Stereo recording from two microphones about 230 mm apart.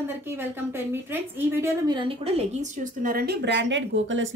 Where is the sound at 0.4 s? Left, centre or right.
Centre.